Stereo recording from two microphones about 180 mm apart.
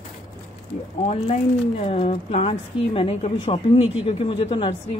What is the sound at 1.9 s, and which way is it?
A woman's voice, 35° left (ahead or behind).